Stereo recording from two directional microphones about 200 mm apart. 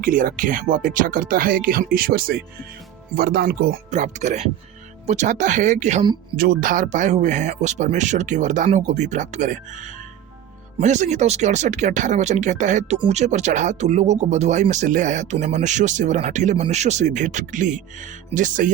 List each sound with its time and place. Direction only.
0.0 s speech: 40° right (ahead or behind)